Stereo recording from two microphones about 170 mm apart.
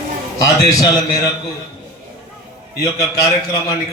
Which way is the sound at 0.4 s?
20° left (ahead or behind).